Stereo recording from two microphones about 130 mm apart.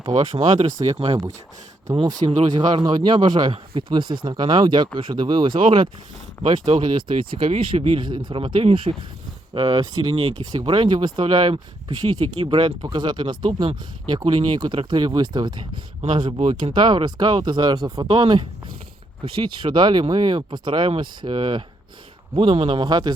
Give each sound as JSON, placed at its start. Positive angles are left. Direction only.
{"t": 0.1, "sound": "speech", "side_deg": -60}
{"t": 0.9, "sound": "speech", "side_deg": -45}
{"t": 7.5, "sound": "speech", "side_deg": -45}
{"t": 9.6, "sound": "speech", "side_deg": -30}